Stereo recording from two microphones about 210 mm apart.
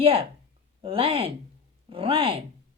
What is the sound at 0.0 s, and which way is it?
Speech, 25° right (ahead or behind).